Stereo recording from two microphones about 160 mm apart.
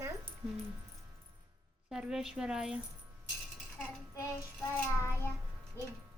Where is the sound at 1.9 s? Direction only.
5° right (ahead or behind).